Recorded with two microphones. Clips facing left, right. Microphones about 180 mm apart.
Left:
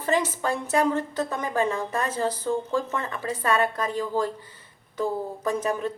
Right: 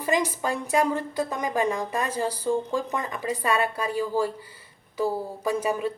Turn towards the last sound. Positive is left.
turn(degrees=-10)  # may be behind; listen again after turning